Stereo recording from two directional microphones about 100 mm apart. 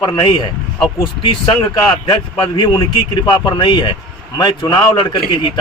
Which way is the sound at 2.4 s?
50° left (ahead or behind).